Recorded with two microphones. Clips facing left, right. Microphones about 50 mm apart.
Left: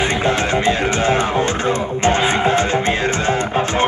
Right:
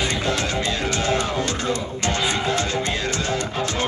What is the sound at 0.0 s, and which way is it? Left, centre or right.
Music, left.